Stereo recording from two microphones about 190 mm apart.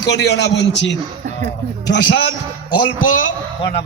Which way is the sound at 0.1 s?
65° left (ahead or behind).